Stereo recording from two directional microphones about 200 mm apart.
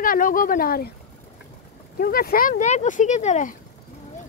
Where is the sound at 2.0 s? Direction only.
45° left (ahead or behind).